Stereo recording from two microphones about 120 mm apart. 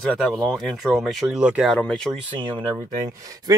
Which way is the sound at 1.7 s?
5° left (ahead or behind).